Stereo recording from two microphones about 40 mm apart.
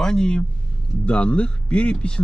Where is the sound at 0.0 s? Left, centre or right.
Centre.